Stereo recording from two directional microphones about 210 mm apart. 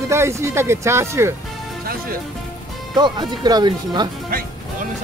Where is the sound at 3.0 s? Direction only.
20° right (ahead or behind).